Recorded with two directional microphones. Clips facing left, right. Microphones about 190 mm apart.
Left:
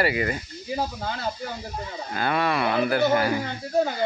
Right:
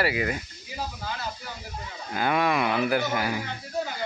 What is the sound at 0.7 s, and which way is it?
Speech, 55° left (ahead or behind).